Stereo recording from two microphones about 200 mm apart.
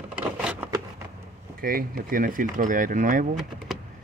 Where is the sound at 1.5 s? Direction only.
45° right (ahead or behind).